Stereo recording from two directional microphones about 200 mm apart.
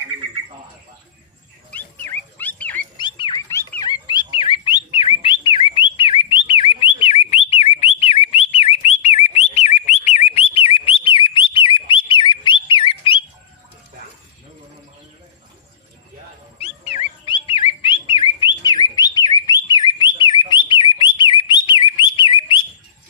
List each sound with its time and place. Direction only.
1.7 s dog: 10° left (ahead or behind)
3.0 s dog: 25° left (ahead or behind)
3.5 s bird: 15° left (ahead or behind)
16.6 s dog: 30° left (ahead or behind)
17.2 s bird: 25° left (ahead or behind)
20.5 s whistle: 25° left (ahead or behind)
21.0 s bird: 25° left (ahead or behind)